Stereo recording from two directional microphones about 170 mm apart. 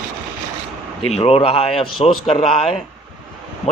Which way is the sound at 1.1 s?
35° left (ahead or behind).